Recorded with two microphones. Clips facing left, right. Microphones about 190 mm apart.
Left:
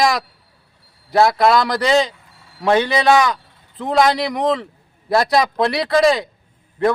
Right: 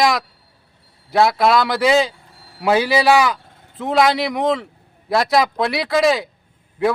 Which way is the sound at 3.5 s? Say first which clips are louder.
Right 5 dB; 50° right (ahead or behind).